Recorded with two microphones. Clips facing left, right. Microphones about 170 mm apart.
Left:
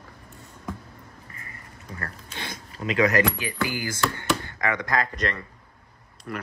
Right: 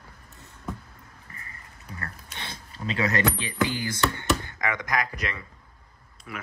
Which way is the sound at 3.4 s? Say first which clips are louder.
Right 1 dB; 25° right (ahead or behind).